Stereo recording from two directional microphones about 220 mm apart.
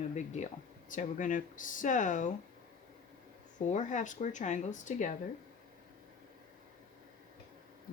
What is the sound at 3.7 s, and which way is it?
Speech, 35° left (ahead or behind).